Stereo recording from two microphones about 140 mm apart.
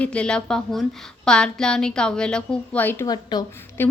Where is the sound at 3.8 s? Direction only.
15° left (ahead or behind).